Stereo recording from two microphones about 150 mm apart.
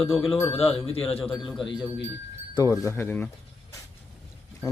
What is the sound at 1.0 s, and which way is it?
Speech, 5° left (ahead or behind).